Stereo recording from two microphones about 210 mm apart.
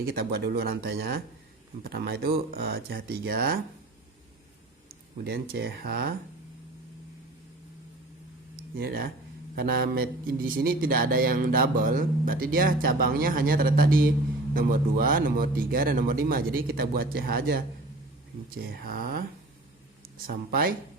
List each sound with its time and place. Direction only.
0.1 s speech: 45° right (ahead or behind)
5.1 s speech: 45° right (ahead or behind)
8.8 s speech: 45° right (ahead or behind)